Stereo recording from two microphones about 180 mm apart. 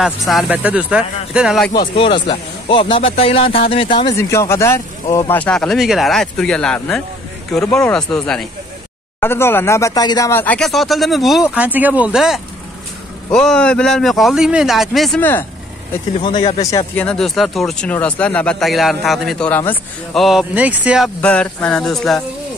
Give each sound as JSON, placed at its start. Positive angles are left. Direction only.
{"t": 0.0, "sound": "speech", "side_deg": 0}
{"t": 1.7, "sound": "speech", "side_deg": 30}
{"t": 4.2, "sound": "speech", "side_deg": 15}
{"t": 16.2, "sound": "speech", "side_deg": 30}
{"t": 16.7, "sound": "speech", "side_deg": 10}
{"t": 20.2, "sound": "speech", "side_deg": 0}
{"t": 21.2, "sound": "speech", "side_deg": 5}